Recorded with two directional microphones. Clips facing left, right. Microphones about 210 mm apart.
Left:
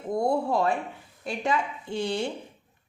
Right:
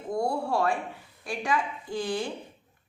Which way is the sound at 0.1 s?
20° left (ahead or behind).